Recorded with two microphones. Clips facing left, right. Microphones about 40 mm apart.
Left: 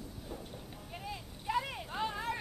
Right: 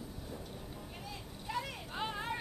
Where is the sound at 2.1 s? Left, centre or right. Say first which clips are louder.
Left 1 dB; centre.